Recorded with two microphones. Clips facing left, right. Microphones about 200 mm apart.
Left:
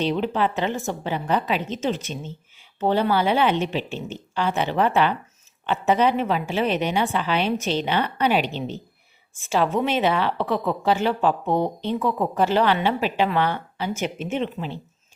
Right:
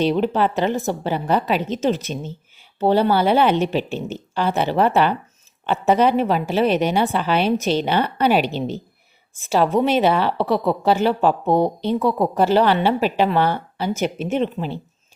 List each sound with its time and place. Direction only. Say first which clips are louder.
0.0 s a woman's voice: right 4 dB; 40° right (ahead or behind)